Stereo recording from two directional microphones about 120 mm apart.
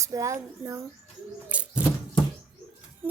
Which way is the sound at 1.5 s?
10° right (ahead or behind).